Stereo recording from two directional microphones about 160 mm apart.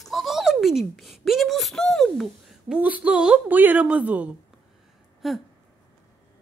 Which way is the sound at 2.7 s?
10° right (ahead or behind).